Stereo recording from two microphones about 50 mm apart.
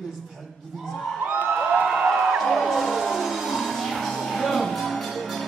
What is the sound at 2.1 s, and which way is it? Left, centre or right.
Music, centre.